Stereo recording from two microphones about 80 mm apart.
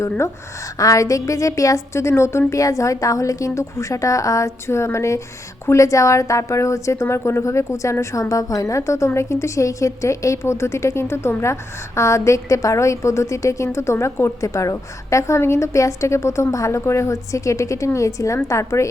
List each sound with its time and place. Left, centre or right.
0.8 s a woman's voice: left